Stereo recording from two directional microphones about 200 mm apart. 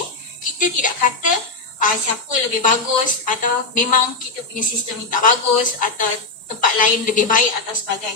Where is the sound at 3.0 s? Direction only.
40° left (ahead or behind).